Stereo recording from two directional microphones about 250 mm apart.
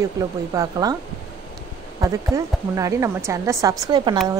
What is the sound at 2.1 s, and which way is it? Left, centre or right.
A woman's voice, centre.